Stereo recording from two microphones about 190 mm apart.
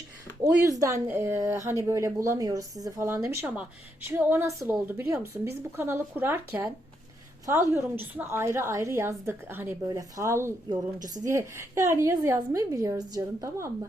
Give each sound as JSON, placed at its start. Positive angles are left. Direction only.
{"t": 0.4, "sound": "a woman's voice", "side_deg": -15}